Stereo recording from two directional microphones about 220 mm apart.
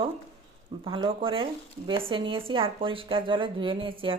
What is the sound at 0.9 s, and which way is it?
Speech, 25° right (ahead or behind).